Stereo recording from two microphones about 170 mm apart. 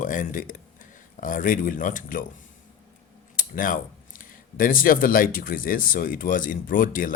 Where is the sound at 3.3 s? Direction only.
55° left (ahead or behind).